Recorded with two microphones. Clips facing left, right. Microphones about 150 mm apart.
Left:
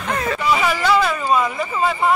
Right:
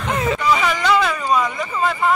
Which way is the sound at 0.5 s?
5° left (ahead or behind).